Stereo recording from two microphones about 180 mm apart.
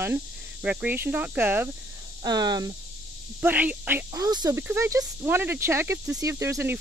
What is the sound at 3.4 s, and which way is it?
Speech, 10° right (ahead or behind).